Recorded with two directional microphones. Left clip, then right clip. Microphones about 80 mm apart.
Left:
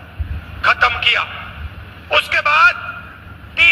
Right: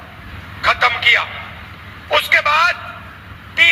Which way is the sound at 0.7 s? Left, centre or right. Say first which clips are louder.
Even; left.